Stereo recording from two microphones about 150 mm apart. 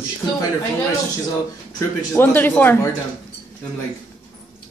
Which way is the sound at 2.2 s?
15° left (ahead or behind).